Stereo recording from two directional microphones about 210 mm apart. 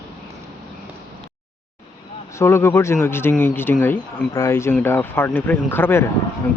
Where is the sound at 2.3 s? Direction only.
10° left (ahead or behind).